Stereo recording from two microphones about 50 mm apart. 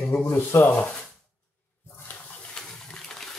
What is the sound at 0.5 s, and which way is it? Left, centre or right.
Speech, left.